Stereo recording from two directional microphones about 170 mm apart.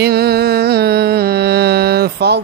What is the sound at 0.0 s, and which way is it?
Music, 65° right (ahead or behind).